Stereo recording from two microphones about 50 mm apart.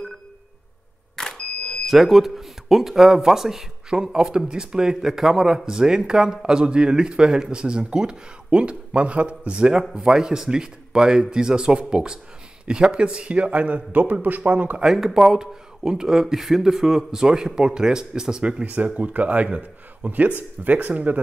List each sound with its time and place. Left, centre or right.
1.1 s vehicle: centre
1.9 s a man's voice: centre; by 14.8 s right
14.8 s speech: centre
18.6 s a man's voice: right